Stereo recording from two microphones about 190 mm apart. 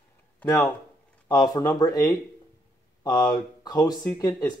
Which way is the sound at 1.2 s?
20° left (ahead or behind).